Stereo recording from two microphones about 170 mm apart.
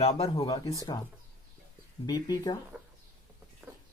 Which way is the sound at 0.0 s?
35° left (ahead or behind).